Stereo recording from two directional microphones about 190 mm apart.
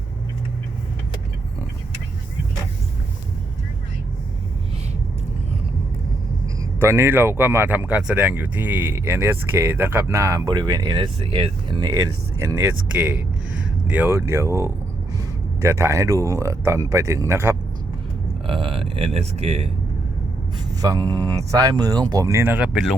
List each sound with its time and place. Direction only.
6.7 s speech: 15° right (ahead or behind)
18.4 s a sound: 30° right (ahead or behind)
20.8 s speech: 20° right (ahead or behind); by 23.0 s centre (ahead or behind)